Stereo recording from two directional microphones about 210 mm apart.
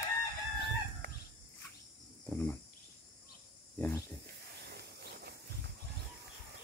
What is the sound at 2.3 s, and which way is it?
Cricket, 5° left (ahead or behind).